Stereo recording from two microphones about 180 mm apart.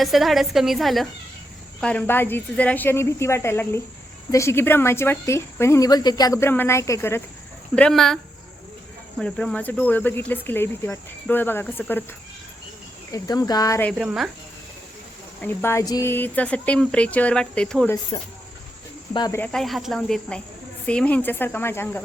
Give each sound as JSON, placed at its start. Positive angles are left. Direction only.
{"t": 0.0, "sound": "speech", "side_deg": 0}
{"t": 7.8, "sound": "speech", "side_deg": 5}
{"t": 13.1, "sound": "cricket", "side_deg": 20}
{"t": 14.0, "sound": "speech", "side_deg": -5}
{"t": 15.4, "sound": "speech", "side_deg": 10}
{"t": 19.1, "sound": "cricket", "side_deg": 20}
{"t": 19.4, "sound": "speech", "side_deg": 5}